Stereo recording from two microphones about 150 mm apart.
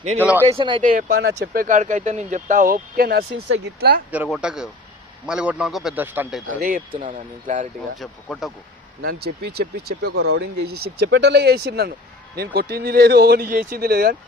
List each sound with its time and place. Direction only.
0.2 s a man's voice: 15° right (ahead or behind)
0.4 s speech: 35° right (ahead or behind)
0.8 s speech: 60° right (ahead or behind); by 4.0 s 90° right
4.1 s a man's voice: 10° right (ahead or behind)
6.6 s speech: 70° right (ahead or behind)
7.0 s speech: 60° right (ahead or behind)
7.9 s speech: centre (ahead or behind)
9.0 s speech: 90° right